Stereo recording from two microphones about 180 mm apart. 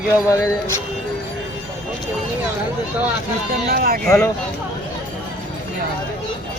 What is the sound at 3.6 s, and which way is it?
Speech, 55° right (ahead or behind).